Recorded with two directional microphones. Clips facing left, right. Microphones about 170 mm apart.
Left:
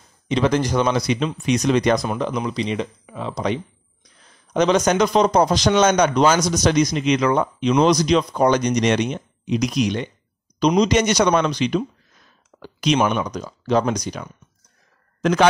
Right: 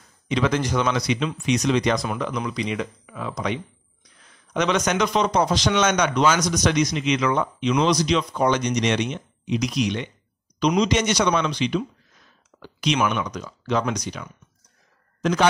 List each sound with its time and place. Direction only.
0.3 s a man's voice: 35° left (ahead or behind)
1.0 s speech: 45° left (ahead or behind)
2.1 s a man's voice: 30° left (ahead or behind)